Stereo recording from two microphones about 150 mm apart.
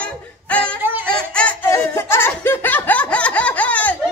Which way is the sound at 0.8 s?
15° right (ahead or behind).